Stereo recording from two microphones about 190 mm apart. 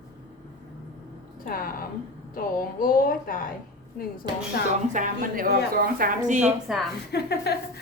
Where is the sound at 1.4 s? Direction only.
50° left (ahead or behind).